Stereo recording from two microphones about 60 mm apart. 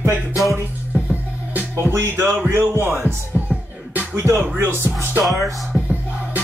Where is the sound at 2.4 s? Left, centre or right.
Right.